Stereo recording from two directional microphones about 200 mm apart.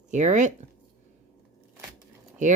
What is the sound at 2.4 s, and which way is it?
Speech, 40° right (ahead or behind).